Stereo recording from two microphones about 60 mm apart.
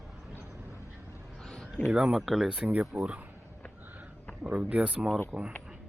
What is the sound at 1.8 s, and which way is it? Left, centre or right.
Speech, centre.